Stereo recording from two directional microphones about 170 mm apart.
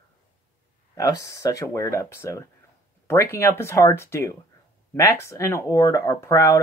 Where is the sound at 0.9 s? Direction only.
20° left (ahead or behind).